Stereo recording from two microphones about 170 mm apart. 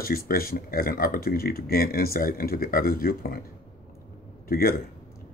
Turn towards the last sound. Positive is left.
turn(degrees=60)  # may be behind; listen again after turning